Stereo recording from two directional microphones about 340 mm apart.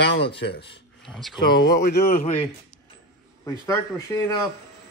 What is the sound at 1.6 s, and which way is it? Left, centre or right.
Speech, left.